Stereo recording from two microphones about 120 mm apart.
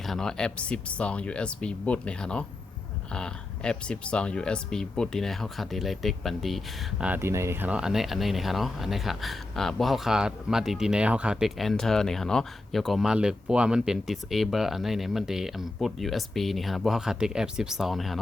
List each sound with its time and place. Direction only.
0.0 s speech: 5° left (ahead or behind)
7.1 s speech: 20° right (ahead or behind)
7.8 s speech: 5° right (ahead or behind)